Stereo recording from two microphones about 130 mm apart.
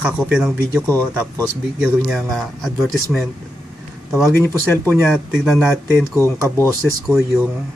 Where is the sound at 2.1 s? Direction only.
Centre (ahead or behind).